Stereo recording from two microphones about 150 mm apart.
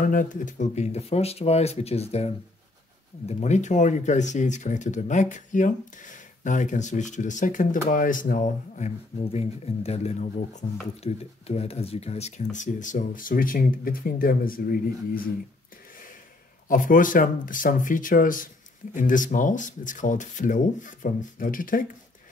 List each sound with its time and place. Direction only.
0.0 s speech: 60° left (ahead or behind)
16.6 s speech: 60° left (ahead or behind)